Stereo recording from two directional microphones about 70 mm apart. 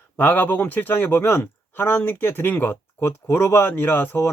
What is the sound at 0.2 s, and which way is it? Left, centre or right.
Speech, left.